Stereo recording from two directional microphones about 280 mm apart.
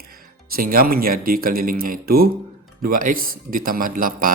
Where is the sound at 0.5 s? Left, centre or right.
Right.